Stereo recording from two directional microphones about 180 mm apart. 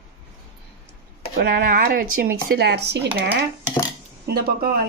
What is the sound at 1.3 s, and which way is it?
Speech, 55° right (ahead or behind).